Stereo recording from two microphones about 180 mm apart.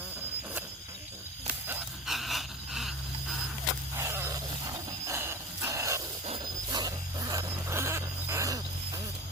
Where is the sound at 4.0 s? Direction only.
15° right (ahead or behind).